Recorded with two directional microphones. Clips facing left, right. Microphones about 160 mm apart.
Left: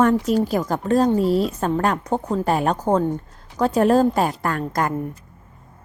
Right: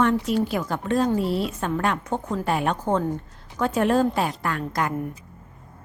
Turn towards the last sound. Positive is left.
turn(degrees=45)  # may be behind; listen again after turning